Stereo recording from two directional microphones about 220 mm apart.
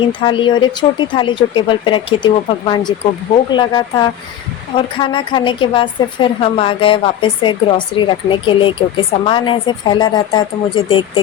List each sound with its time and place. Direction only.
0.1 s a woman's voice: 20° left (ahead or behind)